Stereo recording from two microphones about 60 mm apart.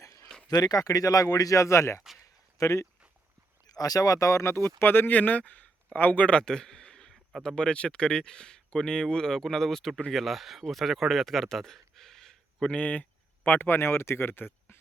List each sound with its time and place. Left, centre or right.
0.0 s a sound: left
0.5 s speech: left
3.7 s speech: left
6.4 s a sound: centre
7.4 s speech: centre
12.7 s speech: left